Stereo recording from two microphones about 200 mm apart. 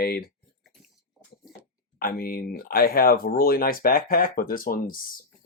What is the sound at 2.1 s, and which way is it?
Speech, 45° left (ahead or behind).